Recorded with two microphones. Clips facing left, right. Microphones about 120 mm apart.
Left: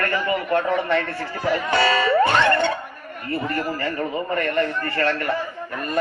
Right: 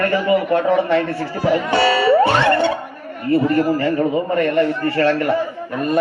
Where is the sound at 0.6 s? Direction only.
35° right (ahead or behind).